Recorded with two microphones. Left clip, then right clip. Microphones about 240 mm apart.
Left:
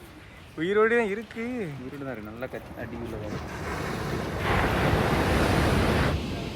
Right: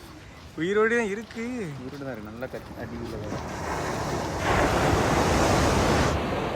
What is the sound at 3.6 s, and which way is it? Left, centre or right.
Waves, right.